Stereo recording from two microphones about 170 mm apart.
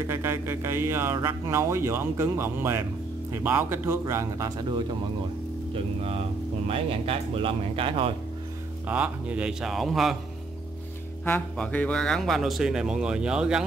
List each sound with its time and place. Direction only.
0.0 s speech: 15° right (ahead or behind)
6.7 s speech: 35° right (ahead or behind)
8.8 s a man's voice: 10° right (ahead or behind)
11.2 s a man's voice: 10° left (ahead or behind)